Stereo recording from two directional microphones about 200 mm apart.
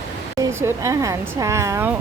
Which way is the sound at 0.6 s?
15° right (ahead or behind).